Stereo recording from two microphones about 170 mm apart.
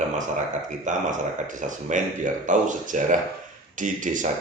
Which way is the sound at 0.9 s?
50° right (ahead or behind).